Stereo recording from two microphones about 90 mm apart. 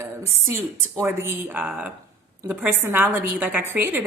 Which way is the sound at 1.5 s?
15° right (ahead or behind).